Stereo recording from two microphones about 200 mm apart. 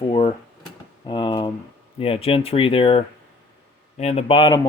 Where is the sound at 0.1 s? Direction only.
25° left (ahead or behind).